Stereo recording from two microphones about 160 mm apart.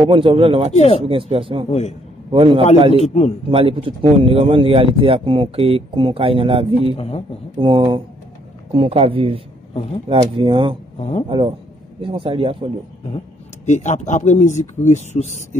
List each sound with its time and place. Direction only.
0.0 s a man's voice: 30° right (ahead or behind)
0.7 s speech: 40° left (ahead or behind)
1.0 s a man's voice: 35° right (ahead or behind)
1.7 s speech: 45° left (ahead or behind)
2.3 s a man's voice: 35° right (ahead or behind)
7.0 s speech: 35° left (ahead or behind)
7.5 s a man's voice: 30° right (ahead or behind)
11.0 s speech: 45° left (ahead or behind)
11.2 s a man's voice: 35° right (ahead or behind)
13.7 s speech: 45° left (ahead or behind)